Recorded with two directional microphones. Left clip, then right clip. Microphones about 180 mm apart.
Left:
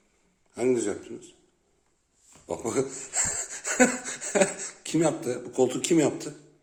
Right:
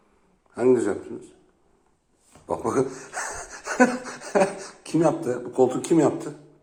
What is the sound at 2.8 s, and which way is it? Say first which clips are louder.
Speech: right 2 dB; 35° left (ahead or behind).